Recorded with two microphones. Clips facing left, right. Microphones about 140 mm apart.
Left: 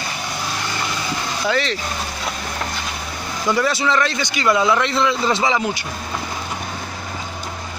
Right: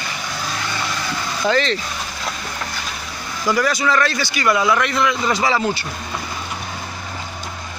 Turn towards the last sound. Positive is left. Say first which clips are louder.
# right 1 dB
turn(degrees=15)  # may be behind; listen again after turning